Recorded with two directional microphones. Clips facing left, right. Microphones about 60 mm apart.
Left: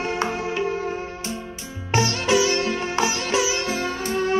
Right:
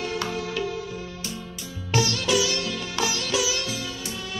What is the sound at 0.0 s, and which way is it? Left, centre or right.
Music, left.